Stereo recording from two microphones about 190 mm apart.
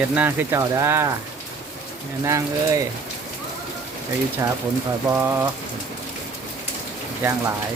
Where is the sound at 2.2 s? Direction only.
15° right (ahead or behind).